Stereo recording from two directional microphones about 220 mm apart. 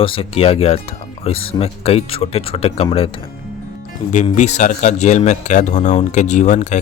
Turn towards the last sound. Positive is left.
turn(degrees=35)  # may be behind; listen again after turning